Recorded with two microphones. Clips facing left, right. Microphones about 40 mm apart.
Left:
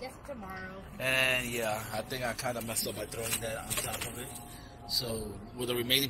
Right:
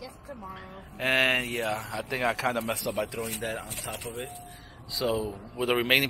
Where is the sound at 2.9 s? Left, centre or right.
Right.